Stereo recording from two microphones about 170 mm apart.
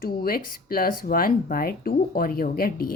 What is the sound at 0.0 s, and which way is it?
Speech, 60° left (ahead or behind).